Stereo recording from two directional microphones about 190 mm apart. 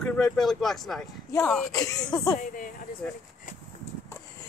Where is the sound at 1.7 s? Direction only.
15° left (ahead or behind).